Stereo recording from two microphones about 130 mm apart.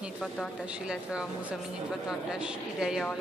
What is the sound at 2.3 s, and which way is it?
Speech, 5° right (ahead or behind).